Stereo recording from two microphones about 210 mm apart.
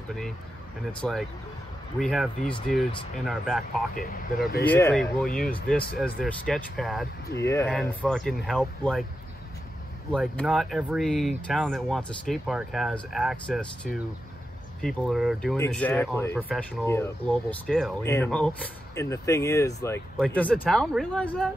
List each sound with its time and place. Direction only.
1.0 s speech: centre (ahead or behind)
3.9 s speech: 40° left (ahead or behind)
4.6 s speech: 10° left (ahead or behind)
7.3 s speech: 15° left (ahead or behind)
10.1 s speech: centre (ahead or behind)
15.5 s speech: 10° left (ahead or behind)